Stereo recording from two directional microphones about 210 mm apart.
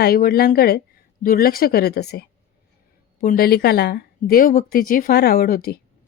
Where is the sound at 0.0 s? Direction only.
45° left (ahead or behind).